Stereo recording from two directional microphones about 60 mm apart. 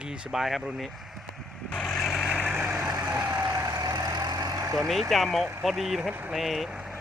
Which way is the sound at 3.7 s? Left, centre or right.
Right.